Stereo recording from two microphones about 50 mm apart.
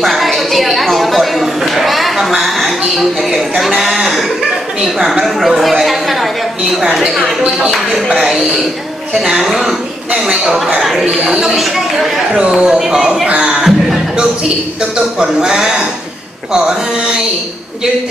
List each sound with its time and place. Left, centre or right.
0.0 s a sound: centre
5.2 s speech: centre
6.7 s speech: centre
12.4 s speech: centre
13.3 s a sound: centre
15.1 s speech: centre